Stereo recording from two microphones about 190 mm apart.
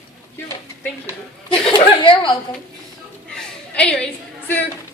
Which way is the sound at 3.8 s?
5° left (ahead or behind).